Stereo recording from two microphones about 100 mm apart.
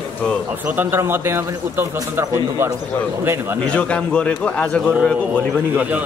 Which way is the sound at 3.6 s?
10° left (ahead or behind).